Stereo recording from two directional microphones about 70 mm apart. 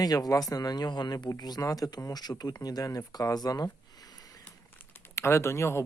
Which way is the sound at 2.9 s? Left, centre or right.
Left.